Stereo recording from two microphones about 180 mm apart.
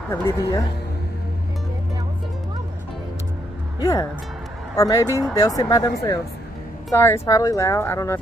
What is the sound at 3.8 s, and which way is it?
Speech, 20° left (ahead or behind).